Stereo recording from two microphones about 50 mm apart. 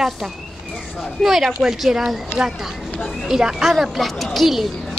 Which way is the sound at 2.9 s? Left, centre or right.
Centre.